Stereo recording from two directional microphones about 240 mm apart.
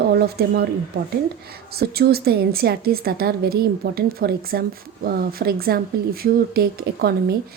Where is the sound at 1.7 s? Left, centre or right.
Right.